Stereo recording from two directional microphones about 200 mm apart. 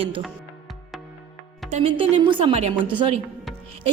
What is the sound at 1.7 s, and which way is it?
A woman's voice, 30° right (ahead or behind).